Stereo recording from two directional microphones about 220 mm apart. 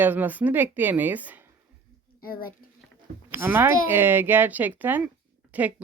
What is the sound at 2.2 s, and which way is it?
Speech, 40° left (ahead or behind).